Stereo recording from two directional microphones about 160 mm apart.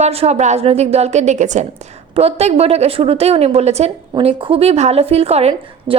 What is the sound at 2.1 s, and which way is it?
A woman's voice, 40° right (ahead or behind).